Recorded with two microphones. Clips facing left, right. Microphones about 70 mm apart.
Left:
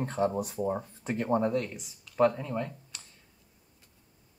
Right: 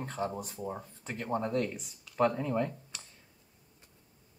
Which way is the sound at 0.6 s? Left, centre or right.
Left.